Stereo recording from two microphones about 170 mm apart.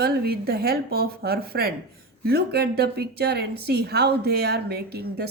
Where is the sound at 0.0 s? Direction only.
65° right (ahead or behind).